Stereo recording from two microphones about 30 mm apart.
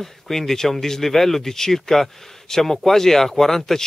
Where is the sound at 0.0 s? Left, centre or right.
Centre.